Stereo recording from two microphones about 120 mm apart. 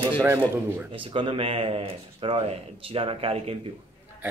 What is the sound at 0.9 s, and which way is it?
Speech, 45° right (ahead or behind).